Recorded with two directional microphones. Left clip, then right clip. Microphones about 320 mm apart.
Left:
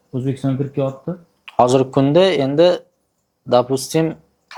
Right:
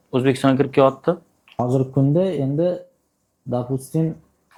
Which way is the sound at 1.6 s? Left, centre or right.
Centre.